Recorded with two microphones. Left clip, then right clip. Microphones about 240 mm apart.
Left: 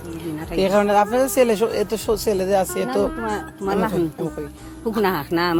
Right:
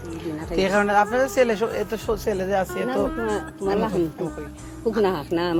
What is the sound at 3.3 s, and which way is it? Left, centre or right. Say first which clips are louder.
A man's voice: left 1 dB; left.